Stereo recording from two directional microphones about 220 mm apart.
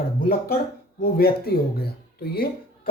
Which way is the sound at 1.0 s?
45° left (ahead or behind).